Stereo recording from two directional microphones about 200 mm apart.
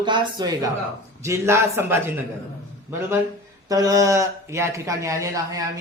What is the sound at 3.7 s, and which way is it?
Speech, 15° right (ahead or behind).